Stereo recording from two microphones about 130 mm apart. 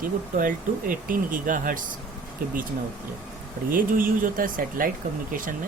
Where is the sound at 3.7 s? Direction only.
90° right.